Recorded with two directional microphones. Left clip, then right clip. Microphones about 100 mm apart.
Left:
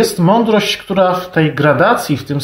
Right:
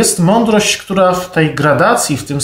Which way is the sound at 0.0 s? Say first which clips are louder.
Even; 20° right (ahead or behind).